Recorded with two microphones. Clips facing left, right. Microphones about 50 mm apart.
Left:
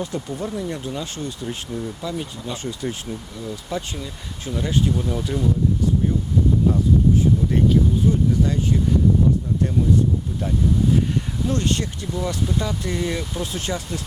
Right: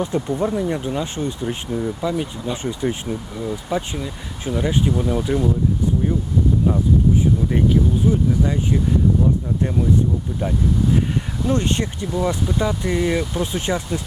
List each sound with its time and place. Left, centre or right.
0.0 s speech: right
6.7 s speech: centre
11.4 s speech: right